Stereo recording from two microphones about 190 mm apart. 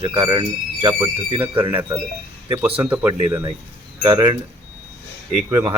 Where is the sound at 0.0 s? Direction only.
25° right (ahead or behind).